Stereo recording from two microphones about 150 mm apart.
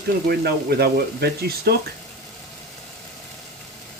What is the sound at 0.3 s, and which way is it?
Speech, 90° right.